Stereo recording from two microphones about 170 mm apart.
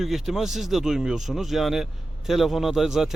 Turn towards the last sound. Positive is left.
turn(degrees=0)  # may be behind; listen again after turning